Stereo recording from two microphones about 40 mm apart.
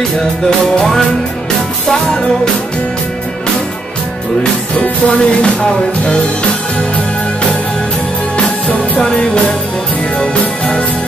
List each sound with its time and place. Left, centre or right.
4.8 s music: left
8.4 s music: left
9.0 s music: left
10.4 s music: left